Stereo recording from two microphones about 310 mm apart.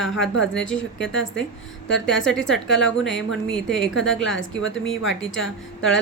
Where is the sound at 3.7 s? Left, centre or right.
Centre.